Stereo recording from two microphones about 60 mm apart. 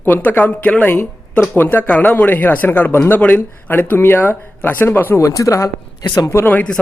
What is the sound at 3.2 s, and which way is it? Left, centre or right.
Speech, left.